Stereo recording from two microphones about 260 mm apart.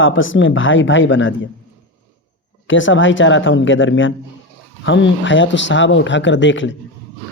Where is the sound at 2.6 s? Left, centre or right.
Left.